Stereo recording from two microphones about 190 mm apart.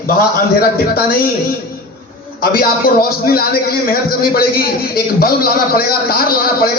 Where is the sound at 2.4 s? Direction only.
50° left (ahead or behind).